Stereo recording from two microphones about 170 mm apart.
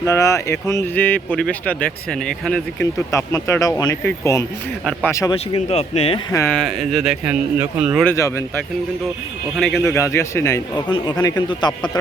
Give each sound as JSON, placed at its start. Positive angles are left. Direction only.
{"t": 0.0, "sound": "speech", "side_deg": 20}
{"t": 3.1, "sound": "speech", "side_deg": 20}
{"t": 5.3, "sound": "speech", "side_deg": 35}
{"t": 6.3, "sound": "speech", "side_deg": 15}
{"t": 6.6, "sound": "speech", "side_deg": 0}
{"t": 8.0, "sound": "speech", "side_deg": 15}
{"t": 9.6, "sound": "speech", "side_deg": 0}
{"t": 9.9, "sound": "speech", "side_deg": 15}